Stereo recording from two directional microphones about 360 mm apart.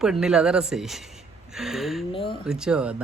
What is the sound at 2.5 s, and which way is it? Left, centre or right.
Speech, centre.